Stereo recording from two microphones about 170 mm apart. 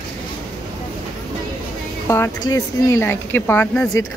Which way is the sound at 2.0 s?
15° left (ahead or behind).